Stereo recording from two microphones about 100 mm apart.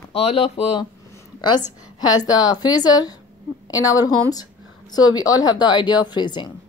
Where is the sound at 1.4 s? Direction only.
45° left (ahead or behind).